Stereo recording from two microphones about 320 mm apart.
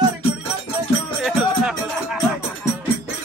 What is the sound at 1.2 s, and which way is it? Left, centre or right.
Music, centre.